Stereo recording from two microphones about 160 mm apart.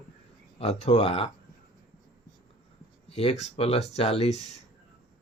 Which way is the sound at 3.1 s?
40° left (ahead or behind).